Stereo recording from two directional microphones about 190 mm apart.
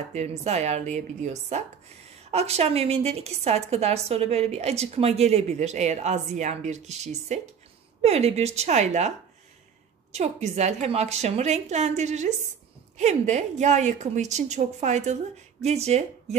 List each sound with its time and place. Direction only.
0.4 s a woman's voice: 35° right (ahead or behind)
10.1 s a woman's voice: 35° right (ahead or behind)